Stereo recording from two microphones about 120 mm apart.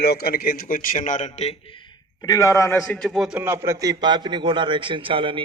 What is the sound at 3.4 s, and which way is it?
A man's voice, 20° right (ahead or behind).